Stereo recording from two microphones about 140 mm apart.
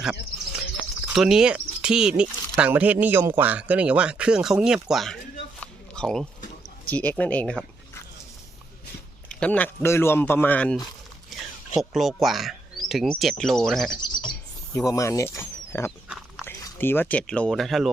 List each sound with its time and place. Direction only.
0.0 s bird: 5° right (ahead or behind)
1.1 s speech: 5° right (ahead or behind)
5.5 s a sound: 5° left (ahead or behind)
6.9 s speech: 10° left (ahead or behind)
9.3 s speech: 10° left (ahead or behind)
14.0 s a sound: 30° left (ahead or behind)
16.5 s speech: 15° left (ahead or behind); by 17.8 s centre (ahead or behind)